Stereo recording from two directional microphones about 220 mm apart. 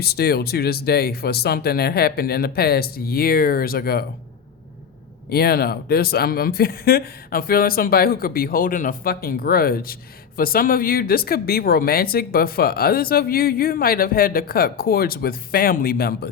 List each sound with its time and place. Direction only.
0.0 s speech: 45° left (ahead or behind)
5.3 s speech: 45° left (ahead or behind)